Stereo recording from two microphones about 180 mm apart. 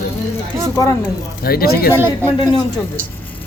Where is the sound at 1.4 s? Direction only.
55° left (ahead or behind).